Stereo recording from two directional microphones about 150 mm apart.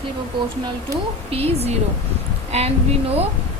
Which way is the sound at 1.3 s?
40° right (ahead or behind).